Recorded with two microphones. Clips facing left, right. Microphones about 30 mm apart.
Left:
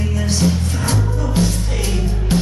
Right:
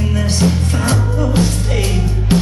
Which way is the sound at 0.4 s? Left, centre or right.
Right.